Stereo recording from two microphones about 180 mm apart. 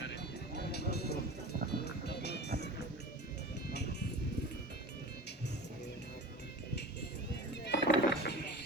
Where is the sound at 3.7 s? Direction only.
70° left (ahead or behind).